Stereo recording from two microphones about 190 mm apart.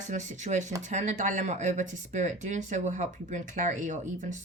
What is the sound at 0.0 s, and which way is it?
Speech, 40° right (ahead or behind).